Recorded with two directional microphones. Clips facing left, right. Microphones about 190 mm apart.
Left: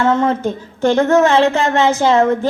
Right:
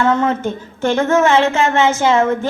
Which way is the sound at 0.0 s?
30° left (ahead or behind).